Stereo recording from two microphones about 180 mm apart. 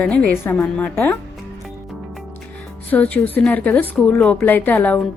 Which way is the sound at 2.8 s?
10° left (ahead or behind).